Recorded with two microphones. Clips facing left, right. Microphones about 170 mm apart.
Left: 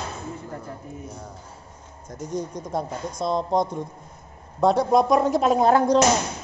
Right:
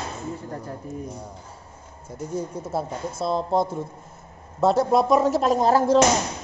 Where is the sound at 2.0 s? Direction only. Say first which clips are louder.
Even; 5° right (ahead or behind).